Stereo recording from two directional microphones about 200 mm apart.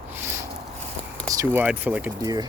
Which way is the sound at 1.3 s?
15° right (ahead or behind).